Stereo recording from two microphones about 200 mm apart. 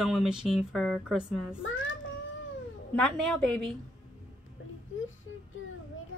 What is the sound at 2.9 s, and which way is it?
Speech, centre (ahead or behind).